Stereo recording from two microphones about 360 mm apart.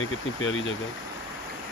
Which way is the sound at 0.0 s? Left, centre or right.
Left.